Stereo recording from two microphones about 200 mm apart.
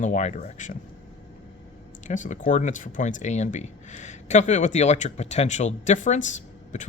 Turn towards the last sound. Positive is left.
turn(degrees=40)  # may be behind; listen again after turning